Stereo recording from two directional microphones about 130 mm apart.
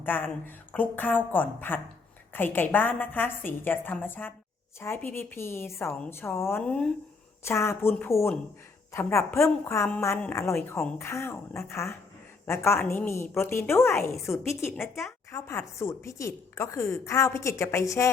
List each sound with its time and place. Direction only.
0.0 s a woman's voice: 15° left (ahead or behind)
7.4 s a woman's voice: 20° left (ahead or behind)